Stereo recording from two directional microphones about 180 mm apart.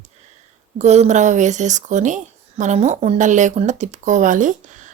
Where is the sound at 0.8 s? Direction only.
40° right (ahead or behind).